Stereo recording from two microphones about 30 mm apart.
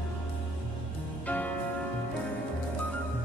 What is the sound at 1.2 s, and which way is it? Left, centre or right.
Music, left.